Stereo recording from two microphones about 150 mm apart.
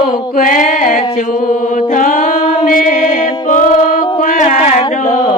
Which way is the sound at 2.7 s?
60° left (ahead or behind).